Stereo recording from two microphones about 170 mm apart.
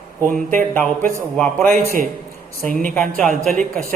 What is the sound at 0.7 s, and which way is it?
A man's voice, 10° left (ahead or behind).